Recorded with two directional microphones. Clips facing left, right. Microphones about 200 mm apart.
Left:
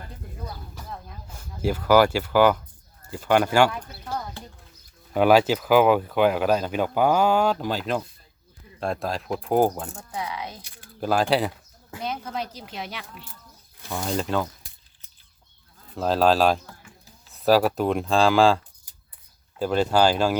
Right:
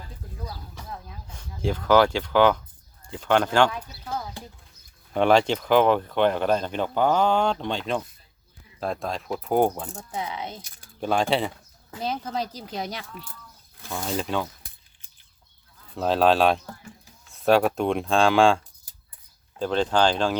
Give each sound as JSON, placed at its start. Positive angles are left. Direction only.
{"t": 0.4, "sound": "speech", "side_deg": 0}
{"t": 4.0, "sound": "a sound", "side_deg": -5}
{"t": 5.1, "sound": "speech", "side_deg": 5}
{"t": 10.1, "sound": "speech", "side_deg": -25}
{"t": 11.0, "sound": "speech", "side_deg": 0}
{"t": 12.0, "sound": "speech", "side_deg": -30}
{"t": 13.9, "sound": "speech", "side_deg": 0}
{"t": 16.0, "sound": "speech", "side_deg": 0}